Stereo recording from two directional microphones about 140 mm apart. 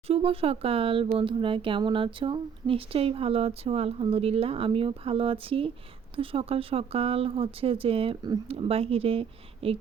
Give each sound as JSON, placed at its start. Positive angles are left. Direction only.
{"t": 0.1, "sound": "speech", "side_deg": -45}